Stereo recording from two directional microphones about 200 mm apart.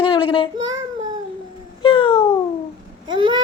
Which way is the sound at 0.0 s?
25° left (ahead or behind).